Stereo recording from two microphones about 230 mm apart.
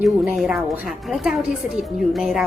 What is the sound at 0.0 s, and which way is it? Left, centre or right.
A woman's voice, centre.